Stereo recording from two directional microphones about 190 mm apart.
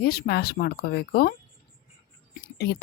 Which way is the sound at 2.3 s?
55° left (ahead or behind).